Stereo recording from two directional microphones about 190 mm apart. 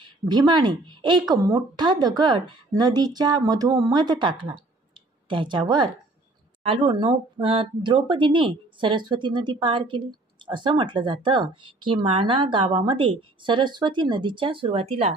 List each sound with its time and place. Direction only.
0.0 s a woman's voice: 20° right (ahead or behind)